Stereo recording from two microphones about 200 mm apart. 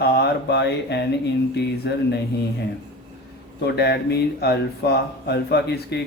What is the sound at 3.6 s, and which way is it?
Speech, 55° left (ahead or behind).